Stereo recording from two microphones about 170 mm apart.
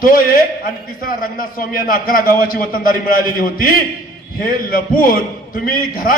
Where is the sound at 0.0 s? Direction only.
55° left (ahead or behind).